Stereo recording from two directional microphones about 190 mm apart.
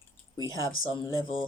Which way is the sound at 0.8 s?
90° left.